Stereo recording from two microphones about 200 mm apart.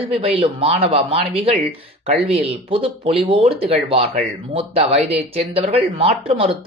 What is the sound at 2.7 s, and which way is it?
Speech, 30° right (ahead or behind).